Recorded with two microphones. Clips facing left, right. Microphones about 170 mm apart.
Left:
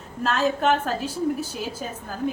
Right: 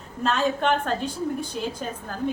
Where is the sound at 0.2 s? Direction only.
5° left (ahead or behind).